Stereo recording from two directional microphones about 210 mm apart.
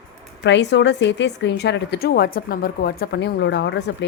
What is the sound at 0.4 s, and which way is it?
A woman's voice, 55° left (ahead or behind).